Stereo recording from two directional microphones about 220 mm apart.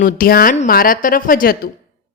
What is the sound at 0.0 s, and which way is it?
Speech, 40° left (ahead or behind).